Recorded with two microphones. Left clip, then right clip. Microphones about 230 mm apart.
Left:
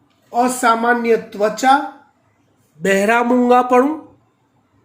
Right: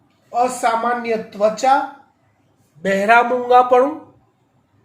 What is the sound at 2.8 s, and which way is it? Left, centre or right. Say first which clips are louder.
Speech: right 1 dB; left.